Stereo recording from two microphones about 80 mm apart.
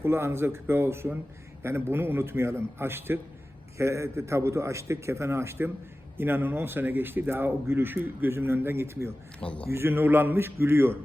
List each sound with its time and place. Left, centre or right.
0.0 s a man's voice: right
9.4 s speech: centre
9.6 s a man's voice: right